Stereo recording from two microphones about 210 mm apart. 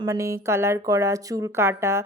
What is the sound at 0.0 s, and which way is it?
Speech, 15° right (ahead or behind).